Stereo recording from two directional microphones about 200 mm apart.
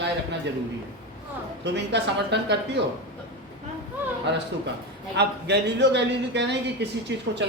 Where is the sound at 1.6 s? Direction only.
60° right (ahead or behind).